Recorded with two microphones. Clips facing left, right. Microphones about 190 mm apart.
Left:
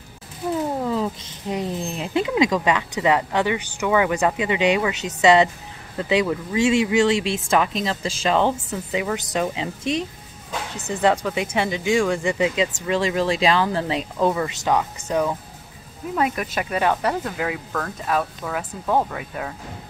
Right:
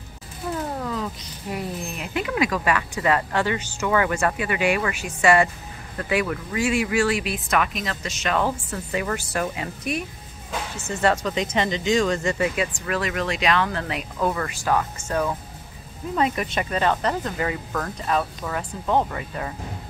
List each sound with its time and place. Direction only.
0.7 s speech: 25° left (ahead or behind)
8.6 s speech: 10° left (ahead or behind)
16.2 s speech: 5° left (ahead or behind)